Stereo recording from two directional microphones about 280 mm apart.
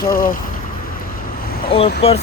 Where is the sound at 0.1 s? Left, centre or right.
Left.